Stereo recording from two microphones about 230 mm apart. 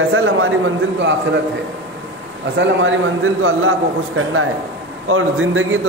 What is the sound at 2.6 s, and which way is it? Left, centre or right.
Speech, right.